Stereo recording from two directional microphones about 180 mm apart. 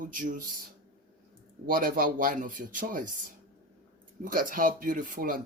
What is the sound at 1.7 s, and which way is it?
Speech, 50° right (ahead or behind).